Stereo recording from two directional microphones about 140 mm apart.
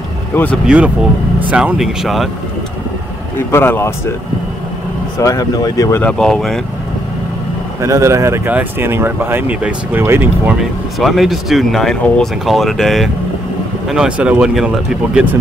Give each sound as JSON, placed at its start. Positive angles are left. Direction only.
{"t": 0.3, "sound": "speech", "side_deg": 15}
{"t": 0.7, "sound": "speech", "side_deg": -10}
{"t": 3.3, "sound": "speech", "side_deg": 15}
{"t": 5.2, "sound": "speech", "side_deg": 25}
{"t": 6.0, "sound": "speech", "side_deg": 5}
{"t": 7.8, "sound": "speech", "side_deg": -20}
{"t": 10.6, "sound": "speech", "side_deg": 0}